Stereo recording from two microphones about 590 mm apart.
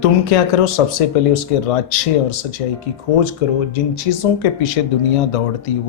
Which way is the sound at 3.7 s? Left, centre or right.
Left.